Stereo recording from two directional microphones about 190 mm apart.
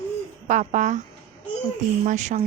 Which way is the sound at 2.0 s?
40° right (ahead or behind).